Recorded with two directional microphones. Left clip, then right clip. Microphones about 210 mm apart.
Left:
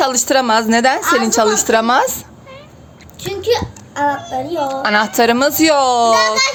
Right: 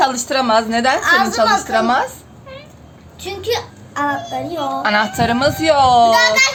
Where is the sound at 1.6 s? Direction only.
55° left (ahead or behind).